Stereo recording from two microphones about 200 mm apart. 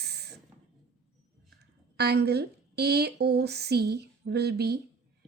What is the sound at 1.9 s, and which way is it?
A woman's voice, 55° right (ahead or behind).